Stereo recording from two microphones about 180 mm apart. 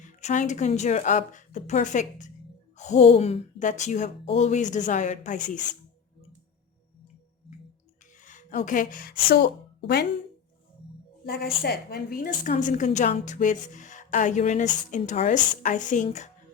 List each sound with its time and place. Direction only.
0.0 s a woman's voice: 40° left (ahead or behind)
8.2 s a woman's voice: 45° left (ahead or behind); by 10.1 s 60° left (ahead or behind)
11.3 s a woman's voice: 60° left (ahead or behind); by 16.3 s 40° left (ahead or behind)